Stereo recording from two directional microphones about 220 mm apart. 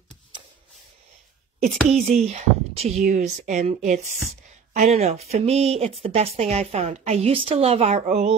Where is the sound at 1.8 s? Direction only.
30° right (ahead or behind).